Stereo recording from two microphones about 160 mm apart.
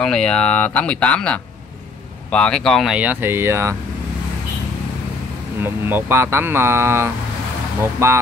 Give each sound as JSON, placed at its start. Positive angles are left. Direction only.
{"t": 0.0, "sound": "speech", "side_deg": 5}
{"t": 5.6, "sound": "speech", "side_deg": -15}